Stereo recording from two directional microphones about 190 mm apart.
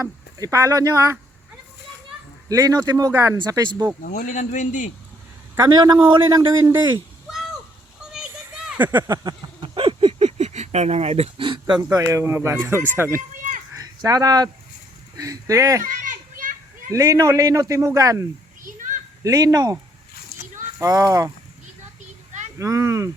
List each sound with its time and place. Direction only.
0.0 s speech: 15° right (ahead or behind)
2.5 s a man's voice: 15° right (ahead or behind)
4.0 s a man's voice: 45° left (ahead or behind)
5.5 s a man's voice: 20° right (ahead or behind)
8.1 s a child's voice: 5° right (ahead or behind)
13.3 s a sound: 40° right (ahead or behind)
13.7 s a man's voice: 20° right (ahead or behind)
15.8 s children playing: 45° right (ahead or behind)
16.9 s a man's voice: 15° right (ahead or behind)
22.5 s a man's voice: 15° right (ahead or behind)